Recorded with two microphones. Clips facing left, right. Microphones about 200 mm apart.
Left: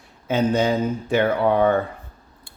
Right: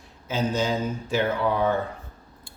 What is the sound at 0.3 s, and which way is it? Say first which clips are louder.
Speech: left 6 dB; 60° left (ahead or behind).